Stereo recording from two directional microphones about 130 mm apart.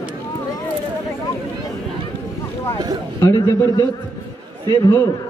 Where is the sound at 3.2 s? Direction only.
25° left (ahead or behind).